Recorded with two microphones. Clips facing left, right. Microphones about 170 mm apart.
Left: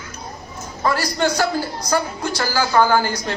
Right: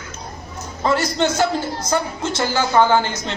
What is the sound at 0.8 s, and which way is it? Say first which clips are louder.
A woman's voice: right 1 dB; 25° right (ahead or behind).